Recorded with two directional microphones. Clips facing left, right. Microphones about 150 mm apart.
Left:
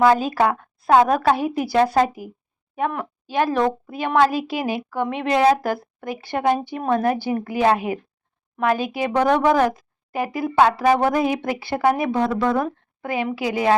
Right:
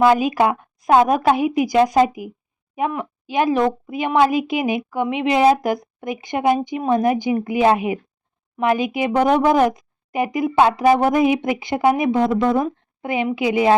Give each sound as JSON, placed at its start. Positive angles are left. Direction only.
{"t": 0.0, "sound": "a woman's voice", "side_deg": -15}